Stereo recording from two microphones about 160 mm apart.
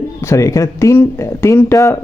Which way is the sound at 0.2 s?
20° left (ahead or behind).